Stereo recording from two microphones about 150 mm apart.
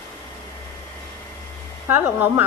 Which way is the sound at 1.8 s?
15° right (ahead or behind).